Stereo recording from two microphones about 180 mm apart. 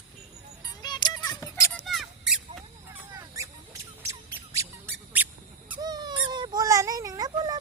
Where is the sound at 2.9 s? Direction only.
20° right (ahead or behind).